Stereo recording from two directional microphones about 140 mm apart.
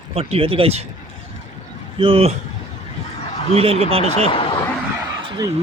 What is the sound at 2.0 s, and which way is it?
Speech, 40° right (ahead or behind).